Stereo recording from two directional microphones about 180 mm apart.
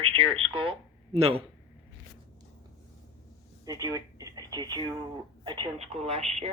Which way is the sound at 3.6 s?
20° right (ahead or behind).